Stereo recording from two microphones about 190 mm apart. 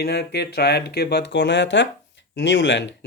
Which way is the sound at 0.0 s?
60° left (ahead or behind).